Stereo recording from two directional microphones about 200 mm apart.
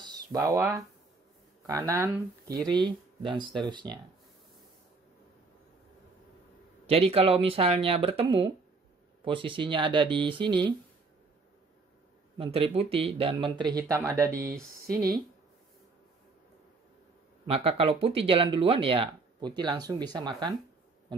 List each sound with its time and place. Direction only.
0.0 s a sound: 20° right (ahead or behind)
1.7 s speech: 15° right (ahead or behind)
2.7 s speech: 25° right (ahead or behind)
6.9 s speech: 30° right (ahead or behind)
12.4 s speech: 30° right (ahead or behind)
14.4 s speech: 45° right (ahead or behind)
17.5 s speech: 30° right (ahead or behind)